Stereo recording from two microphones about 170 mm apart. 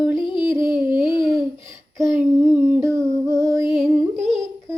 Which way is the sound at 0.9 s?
30° left (ahead or behind).